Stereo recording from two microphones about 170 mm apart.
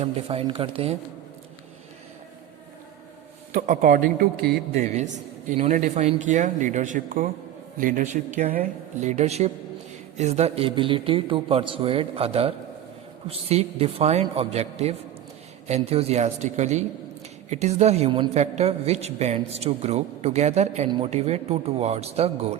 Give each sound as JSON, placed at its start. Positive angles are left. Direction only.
{"t": 0.0, "sound": "a man's voice", "side_deg": -35}
{"t": 3.7, "sound": "speech", "side_deg": -50}
{"t": 4.7, "sound": "a man's voice", "side_deg": -40}